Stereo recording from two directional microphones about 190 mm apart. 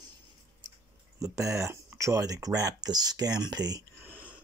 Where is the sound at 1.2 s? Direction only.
15° right (ahead or behind).